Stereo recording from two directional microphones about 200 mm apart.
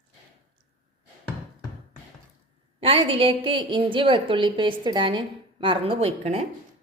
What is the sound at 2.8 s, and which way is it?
A woman's voice, 30° right (ahead or behind).